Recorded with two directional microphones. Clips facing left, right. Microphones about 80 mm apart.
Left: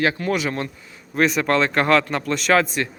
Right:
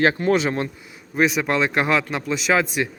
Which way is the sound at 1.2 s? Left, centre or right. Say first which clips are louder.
Left 1 dB; centre.